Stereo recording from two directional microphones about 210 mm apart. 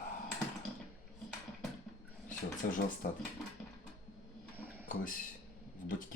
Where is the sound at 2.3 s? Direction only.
40° left (ahead or behind).